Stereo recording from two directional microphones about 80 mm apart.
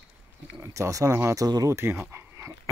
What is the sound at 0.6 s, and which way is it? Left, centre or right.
Speech, right.